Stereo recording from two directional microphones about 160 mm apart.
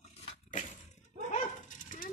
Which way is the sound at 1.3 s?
55° left (ahead or behind).